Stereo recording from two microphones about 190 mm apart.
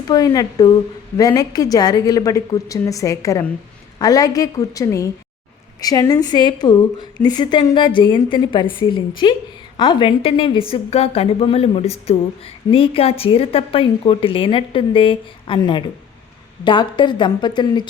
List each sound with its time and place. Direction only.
0.1 s a woman's voice: 20° left (ahead or behind)